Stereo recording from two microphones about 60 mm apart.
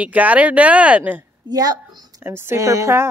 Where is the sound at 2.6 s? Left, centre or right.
Right.